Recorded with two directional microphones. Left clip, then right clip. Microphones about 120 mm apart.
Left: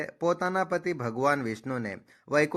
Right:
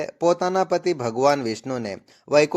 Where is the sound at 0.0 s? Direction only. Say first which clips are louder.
Right 7 dB; 20° right (ahead or behind).